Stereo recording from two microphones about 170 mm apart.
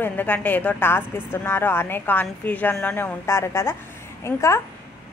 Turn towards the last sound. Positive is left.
turn(degrees=15)  # may be behind; listen again after turning